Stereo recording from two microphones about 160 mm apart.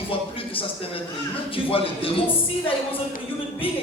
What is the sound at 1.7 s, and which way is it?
Speech, 35° left (ahead or behind).